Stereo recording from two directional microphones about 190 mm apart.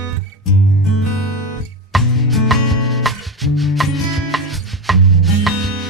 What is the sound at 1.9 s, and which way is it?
Music, centre (ahead or behind).